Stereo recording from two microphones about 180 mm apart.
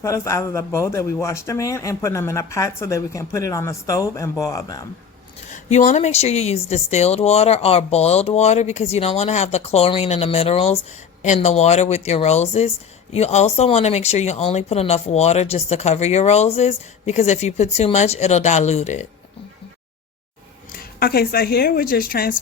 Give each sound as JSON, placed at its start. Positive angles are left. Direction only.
{"t": 0.0, "sound": "speech", "side_deg": 15}
{"t": 5.5, "sound": "speech", "side_deg": 40}
{"t": 21.0, "sound": "a woman's voice", "side_deg": 55}